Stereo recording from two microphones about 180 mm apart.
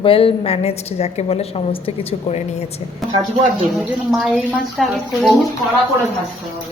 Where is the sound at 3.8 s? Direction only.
Centre (ahead or behind).